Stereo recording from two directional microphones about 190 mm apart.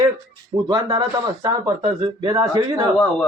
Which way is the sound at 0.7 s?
20° right (ahead or behind).